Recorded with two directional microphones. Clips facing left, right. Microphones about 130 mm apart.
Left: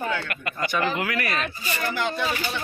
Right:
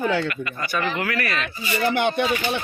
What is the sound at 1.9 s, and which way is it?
Speech, 65° right (ahead or behind).